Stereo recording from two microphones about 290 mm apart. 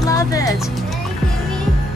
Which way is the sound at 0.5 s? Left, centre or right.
Centre.